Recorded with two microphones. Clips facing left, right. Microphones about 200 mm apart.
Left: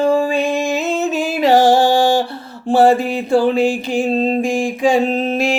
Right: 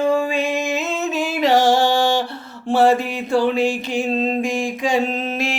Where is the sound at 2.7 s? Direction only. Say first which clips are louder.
Left 3 dB; 35° left (ahead or behind).